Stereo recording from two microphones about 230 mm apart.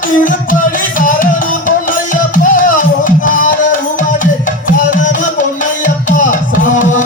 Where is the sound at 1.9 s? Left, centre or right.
Left.